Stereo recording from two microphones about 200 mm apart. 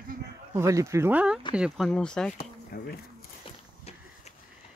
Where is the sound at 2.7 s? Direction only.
50° left (ahead or behind).